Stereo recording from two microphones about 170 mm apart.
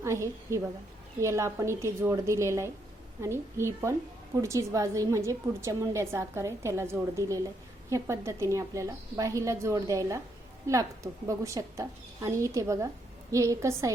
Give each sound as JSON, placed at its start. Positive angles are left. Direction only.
{"t": 0.0, "sound": "a woman's voice", "side_deg": -15}